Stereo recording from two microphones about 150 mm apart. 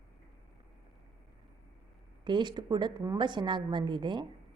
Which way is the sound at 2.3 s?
30° right (ahead or behind).